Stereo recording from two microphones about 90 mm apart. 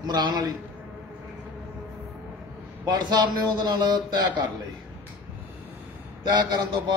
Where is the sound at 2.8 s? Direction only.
50° right (ahead or behind).